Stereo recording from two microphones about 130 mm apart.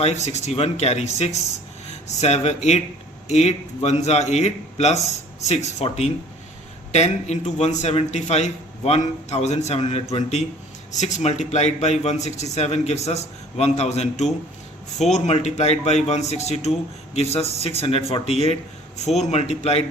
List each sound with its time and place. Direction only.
0.0 s a man's voice: 55° left (ahead or behind)